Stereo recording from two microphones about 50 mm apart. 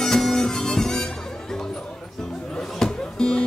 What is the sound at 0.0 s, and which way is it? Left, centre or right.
Harmonica, centre.